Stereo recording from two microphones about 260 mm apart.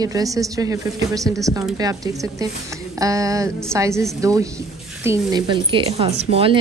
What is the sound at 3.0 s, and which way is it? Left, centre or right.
A woman's voice, centre.